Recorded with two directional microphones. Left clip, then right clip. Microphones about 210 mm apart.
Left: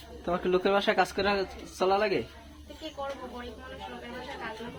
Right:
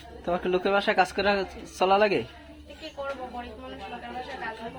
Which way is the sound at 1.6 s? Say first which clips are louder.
Right 5 dB; 30° right (ahead or behind).